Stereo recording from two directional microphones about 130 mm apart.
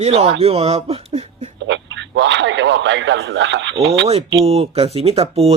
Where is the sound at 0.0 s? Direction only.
55° right (ahead or behind).